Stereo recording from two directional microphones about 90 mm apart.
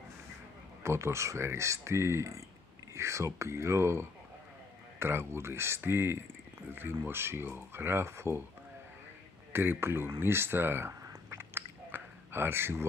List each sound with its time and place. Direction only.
0.8 s speech: 30° right (ahead or behind)
9.5 s speech: 25° right (ahead or behind)
10.2 s chewing: 25° right (ahead or behind)